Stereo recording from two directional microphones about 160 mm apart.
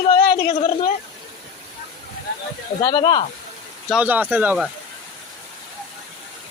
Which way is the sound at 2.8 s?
30° left (ahead or behind).